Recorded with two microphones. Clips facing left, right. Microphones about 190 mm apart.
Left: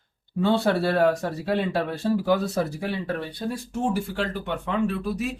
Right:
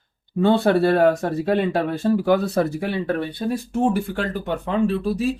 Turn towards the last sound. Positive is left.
turn(degrees=-30)  # may be behind; listen again after turning